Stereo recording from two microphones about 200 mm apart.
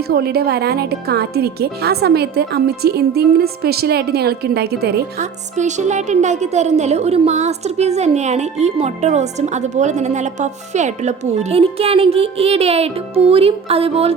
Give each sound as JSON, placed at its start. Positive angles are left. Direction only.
{"t": 0.1, "sound": "speech", "side_deg": -50}
{"t": 5.2, "sound": "a woman's voice", "side_deg": -35}